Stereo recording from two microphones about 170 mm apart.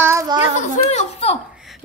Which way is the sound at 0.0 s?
15° right (ahead or behind).